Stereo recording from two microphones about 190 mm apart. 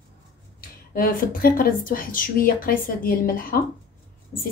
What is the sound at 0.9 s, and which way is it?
Speech, 50° left (ahead or behind).